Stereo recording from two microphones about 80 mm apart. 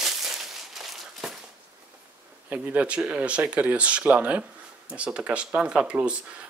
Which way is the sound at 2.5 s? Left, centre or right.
Centre.